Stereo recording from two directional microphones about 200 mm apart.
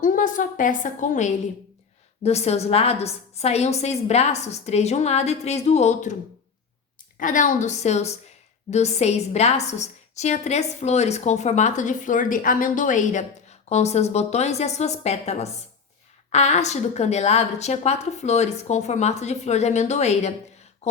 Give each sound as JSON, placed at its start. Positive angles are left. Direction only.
{"t": 0.0, "sound": "a woman's voice", "side_deg": 40}
{"t": 7.2, "sound": "a woman's voice", "side_deg": 40}